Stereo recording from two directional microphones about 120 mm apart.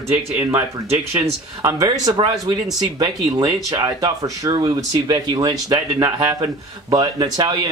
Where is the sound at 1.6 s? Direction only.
30° right (ahead or behind).